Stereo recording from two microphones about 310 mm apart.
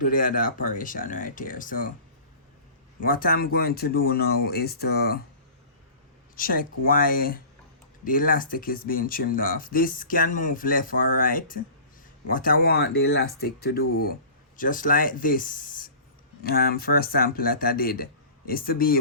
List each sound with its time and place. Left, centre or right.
0.0 s speech: left
3.0 s speech: left
6.3 s speech: left